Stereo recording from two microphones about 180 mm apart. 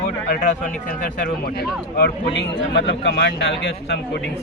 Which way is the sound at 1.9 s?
65° left (ahead or behind).